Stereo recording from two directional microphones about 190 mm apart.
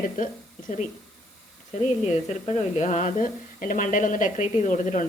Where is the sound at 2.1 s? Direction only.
35° left (ahead or behind).